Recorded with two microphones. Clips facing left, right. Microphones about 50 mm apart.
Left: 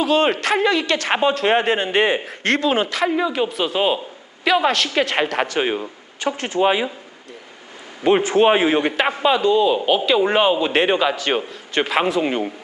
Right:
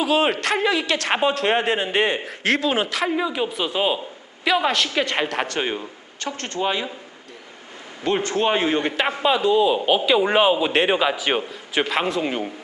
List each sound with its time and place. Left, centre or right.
0.0 s a man's voice: centre
8.0 s a man's voice: centre